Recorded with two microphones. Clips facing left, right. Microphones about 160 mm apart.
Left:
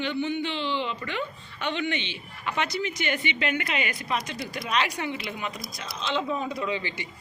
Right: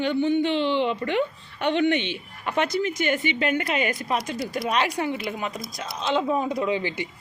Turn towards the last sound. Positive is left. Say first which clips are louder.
# right 5 dB
turn(degrees=-50)  # may be behind; listen again after turning